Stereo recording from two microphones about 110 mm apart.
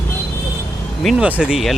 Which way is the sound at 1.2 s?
10° right (ahead or behind).